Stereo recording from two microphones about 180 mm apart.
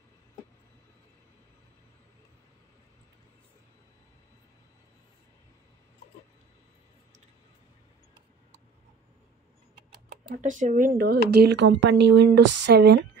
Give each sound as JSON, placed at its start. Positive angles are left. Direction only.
{"t": 10.3, "sound": "speech", "side_deg": -45}